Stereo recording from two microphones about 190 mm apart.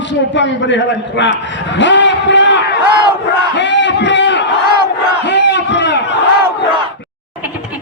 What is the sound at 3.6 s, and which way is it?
Crowd, 70° left (ahead or behind).